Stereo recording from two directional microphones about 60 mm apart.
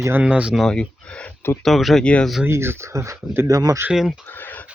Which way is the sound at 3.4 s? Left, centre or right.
Right.